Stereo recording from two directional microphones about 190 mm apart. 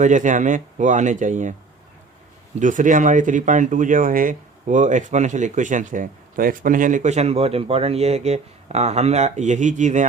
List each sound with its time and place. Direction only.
0.0 s speech: 40° right (ahead or behind)
2.6 s speech: 45° right (ahead or behind)